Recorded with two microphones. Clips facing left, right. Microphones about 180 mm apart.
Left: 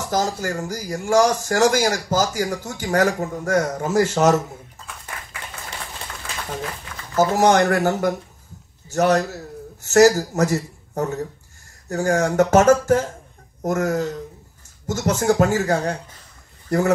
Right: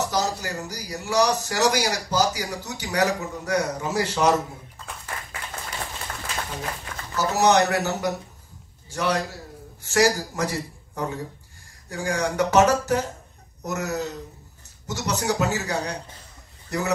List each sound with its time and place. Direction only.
0.0 s speech: 50° left (ahead or behind)
7.2 s a man's voice: 50° left (ahead or behind)